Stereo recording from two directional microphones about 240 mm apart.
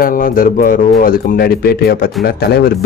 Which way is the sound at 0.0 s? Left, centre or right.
Left.